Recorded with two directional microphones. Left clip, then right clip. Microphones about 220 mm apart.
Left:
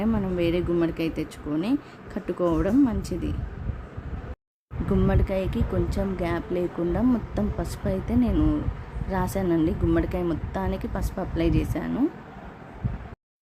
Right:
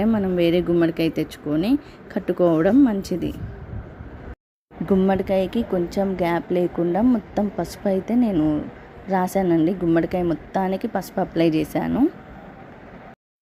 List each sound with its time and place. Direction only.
0.0 s speech: 15° right (ahead or behind)
4.9 s speech: 15° right (ahead or behind)